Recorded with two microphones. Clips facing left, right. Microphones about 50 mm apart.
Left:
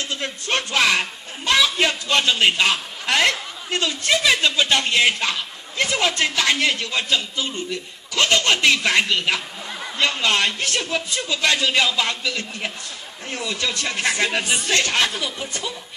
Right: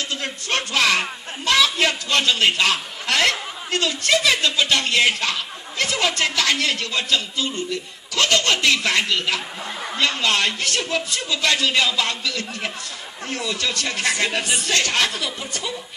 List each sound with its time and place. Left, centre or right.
0.7 s speech: left
1.4 s a sound: left
2.0 s speech: left